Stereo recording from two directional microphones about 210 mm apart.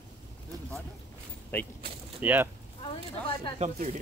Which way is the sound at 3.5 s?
35° right (ahead or behind).